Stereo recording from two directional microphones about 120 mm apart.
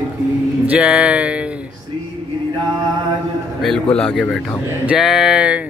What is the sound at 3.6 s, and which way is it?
A man's voice, centre (ahead or behind).